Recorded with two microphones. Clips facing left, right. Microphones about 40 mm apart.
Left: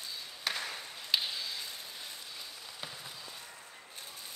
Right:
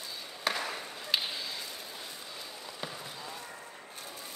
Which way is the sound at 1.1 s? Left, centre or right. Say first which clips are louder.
Even; centre.